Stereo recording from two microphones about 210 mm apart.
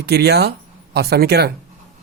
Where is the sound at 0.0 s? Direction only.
50° right (ahead or behind).